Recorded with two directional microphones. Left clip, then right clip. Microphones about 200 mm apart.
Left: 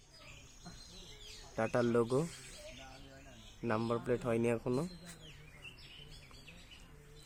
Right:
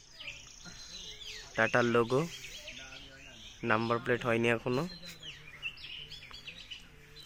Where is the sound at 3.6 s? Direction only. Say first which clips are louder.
Right 5 dB; 10° right (ahead or behind).